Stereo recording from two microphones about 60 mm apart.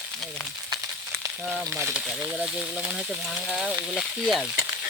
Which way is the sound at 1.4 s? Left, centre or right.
Centre.